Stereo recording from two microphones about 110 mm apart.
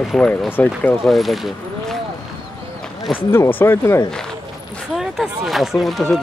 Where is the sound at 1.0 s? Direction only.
Centre (ahead or behind).